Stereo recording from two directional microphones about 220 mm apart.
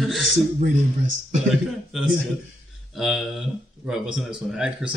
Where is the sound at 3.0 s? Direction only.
Centre (ahead or behind).